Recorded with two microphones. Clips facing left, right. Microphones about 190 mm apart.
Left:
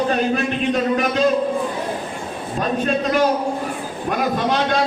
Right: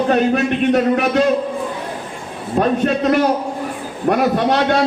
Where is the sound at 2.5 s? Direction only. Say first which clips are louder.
Right 5 dB; 65° right (ahead or behind).